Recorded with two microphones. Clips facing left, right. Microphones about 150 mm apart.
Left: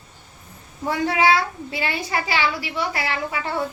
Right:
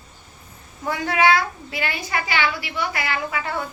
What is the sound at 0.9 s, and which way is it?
A woman's voice, 30° left (ahead or behind).